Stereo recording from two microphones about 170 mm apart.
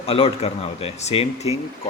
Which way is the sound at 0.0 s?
35° left (ahead or behind).